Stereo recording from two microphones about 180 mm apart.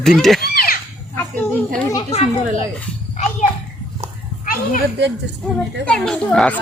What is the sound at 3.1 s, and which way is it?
Children playing, 40° left (ahead or behind).